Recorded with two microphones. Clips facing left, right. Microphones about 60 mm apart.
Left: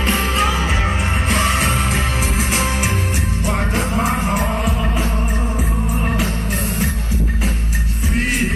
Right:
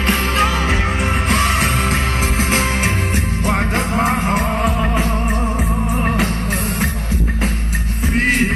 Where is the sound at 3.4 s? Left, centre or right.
Right.